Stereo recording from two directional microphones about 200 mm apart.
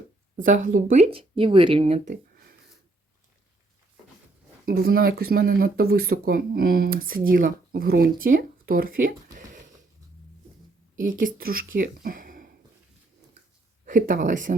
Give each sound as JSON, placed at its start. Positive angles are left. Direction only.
{"t": 0.3, "sound": "speech", "side_deg": -40}
{"t": 2.0, "sound": "a sound", "side_deg": -50}
{"t": 4.6, "sound": "speech", "side_deg": -50}
{"t": 11.0, "sound": "speech", "side_deg": -45}
{"t": 13.8, "sound": "speech", "side_deg": -40}